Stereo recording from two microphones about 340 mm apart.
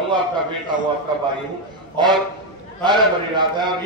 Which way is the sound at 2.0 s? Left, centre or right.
Centre.